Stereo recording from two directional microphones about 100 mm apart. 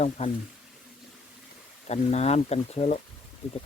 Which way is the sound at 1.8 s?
90° left.